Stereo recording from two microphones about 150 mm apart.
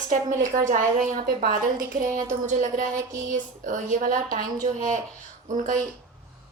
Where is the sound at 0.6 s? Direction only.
60° right (ahead or behind).